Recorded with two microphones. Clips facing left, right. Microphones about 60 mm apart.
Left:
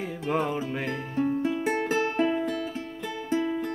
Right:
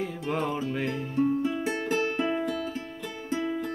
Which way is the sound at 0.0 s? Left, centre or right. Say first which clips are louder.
Left 2 dB; centre.